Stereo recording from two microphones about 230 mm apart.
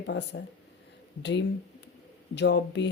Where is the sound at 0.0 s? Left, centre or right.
Left.